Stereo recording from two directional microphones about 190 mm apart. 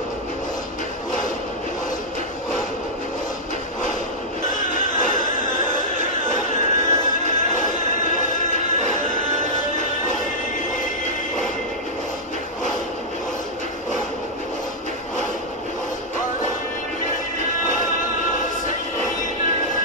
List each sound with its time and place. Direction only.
4.5 s music: 40° left (ahead or behind)